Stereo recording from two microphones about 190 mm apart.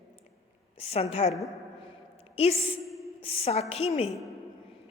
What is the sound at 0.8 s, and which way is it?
Speech, 30° left (ahead or behind).